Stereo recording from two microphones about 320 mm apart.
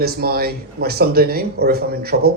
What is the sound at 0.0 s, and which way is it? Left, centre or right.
Speech, right.